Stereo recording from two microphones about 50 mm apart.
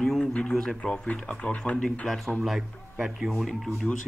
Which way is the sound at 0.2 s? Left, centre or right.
Centre.